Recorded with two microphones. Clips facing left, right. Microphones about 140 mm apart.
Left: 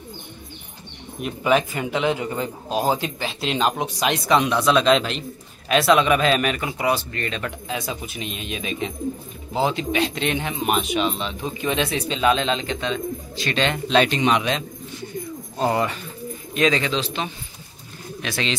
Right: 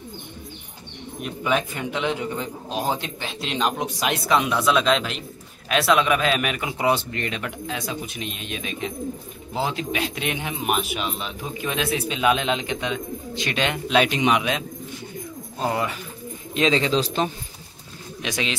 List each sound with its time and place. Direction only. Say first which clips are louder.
1.2 s a man's voice: left 4 dB; 5° left (ahead or behind)
6.8 s speech: right 2 dB; 20° right (ahead or behind)
7.6 s a man's voice: left 1 dB; centre (ahead or behind)
15.6 s a man's voice: left 3 dB; centre (ahead or behind)
16.5 s speech: right 1 dB; 25° right (ahead or behind); by 17.3 s 40° right (ahead or behind)
18.2 s speech: even; 15° right (ahead or behind)